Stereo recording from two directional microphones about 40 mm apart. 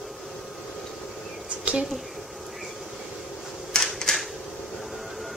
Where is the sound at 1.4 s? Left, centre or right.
Right.